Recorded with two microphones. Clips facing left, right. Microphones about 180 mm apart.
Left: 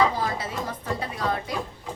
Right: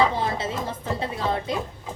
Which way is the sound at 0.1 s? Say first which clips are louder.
Right 2 dB; 25° right (ahead or behind).